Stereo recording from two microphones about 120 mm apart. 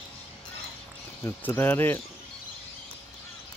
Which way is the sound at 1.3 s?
15° left (ahead or behind).